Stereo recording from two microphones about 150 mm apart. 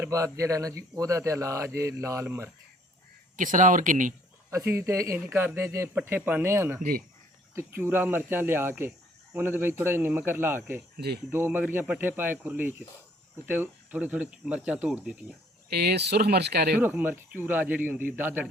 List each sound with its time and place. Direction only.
0.0 s speech: 20° right (ahead or behind)
3.3 s speech: 60° right (ahead or behind)
4.5 s speech: 20° right (ahead or behind)
10.9 s speech: 90° right
11.3 s speech: 15° right (ahead or behind)
15.7 s speech: 90° right
16.8 s speech: 10° right (ahead or behind)